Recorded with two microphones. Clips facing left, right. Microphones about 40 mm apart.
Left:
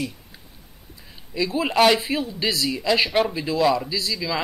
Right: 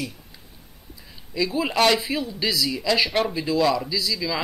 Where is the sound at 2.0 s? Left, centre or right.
Left.